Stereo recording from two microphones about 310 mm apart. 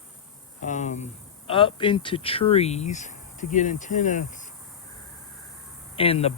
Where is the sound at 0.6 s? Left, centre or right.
Left.